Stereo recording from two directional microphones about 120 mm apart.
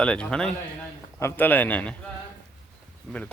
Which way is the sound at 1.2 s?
20° left (ahead or behind).